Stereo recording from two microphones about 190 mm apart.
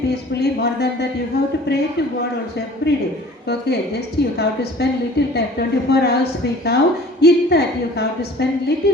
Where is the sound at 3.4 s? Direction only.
60° left (ahead or behind).